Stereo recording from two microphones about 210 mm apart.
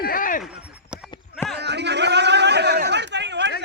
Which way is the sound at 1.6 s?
55° right (ahead or behind).